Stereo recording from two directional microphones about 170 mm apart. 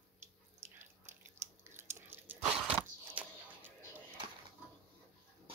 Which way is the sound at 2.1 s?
10° right (ahead or behind).